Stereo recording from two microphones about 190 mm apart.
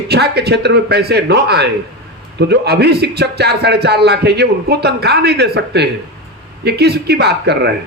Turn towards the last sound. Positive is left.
turn(degrees=-60)  # may be behind; listen again after turning